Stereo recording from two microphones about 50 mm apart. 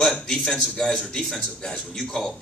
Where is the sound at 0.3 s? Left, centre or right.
Centre.